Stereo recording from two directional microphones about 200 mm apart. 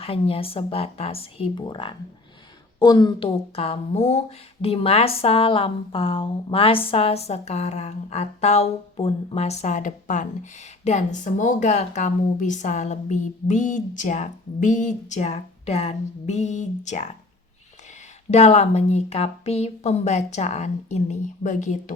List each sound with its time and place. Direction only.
0.0 s speech: 30° left (ahead or behind)
18.3 s speech: 35° left (ahead or behind)